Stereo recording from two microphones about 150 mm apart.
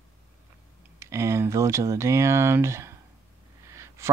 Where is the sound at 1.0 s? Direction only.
20° right (ahead or behind).